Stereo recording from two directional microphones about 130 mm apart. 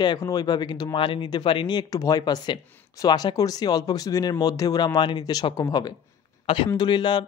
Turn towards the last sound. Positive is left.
turn(degrees=35)  # may be behind; listen again after turning